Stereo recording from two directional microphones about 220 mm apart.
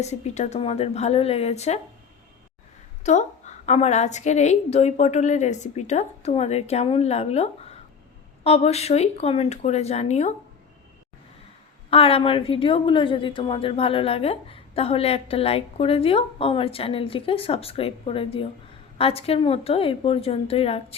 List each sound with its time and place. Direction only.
0.0 s a woman's voice: 30° left (ahead or behind)
3.0 s a woman's voice: 30° left (ahead or behind)
11.9 s a woman's voice: 25° left (ahead or behind)